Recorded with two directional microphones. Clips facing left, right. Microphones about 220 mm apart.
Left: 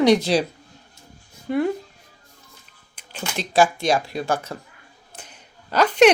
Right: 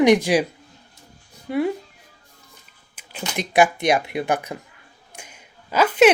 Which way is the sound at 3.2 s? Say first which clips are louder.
Right 1 dB; 15° right (ahead or behind).